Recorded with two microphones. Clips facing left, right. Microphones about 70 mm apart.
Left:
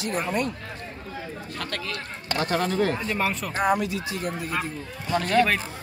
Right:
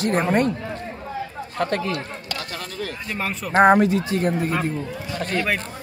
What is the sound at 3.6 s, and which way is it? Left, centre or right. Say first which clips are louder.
Speech: right 9 dB; right.